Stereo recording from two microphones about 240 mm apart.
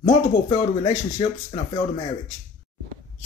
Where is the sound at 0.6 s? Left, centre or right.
Centre.